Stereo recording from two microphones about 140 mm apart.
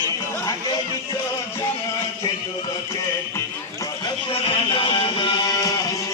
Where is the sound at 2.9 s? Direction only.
20° left (ahead or behind).